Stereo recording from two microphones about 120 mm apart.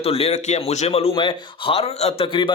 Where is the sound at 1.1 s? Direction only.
45° left (ahead or behind).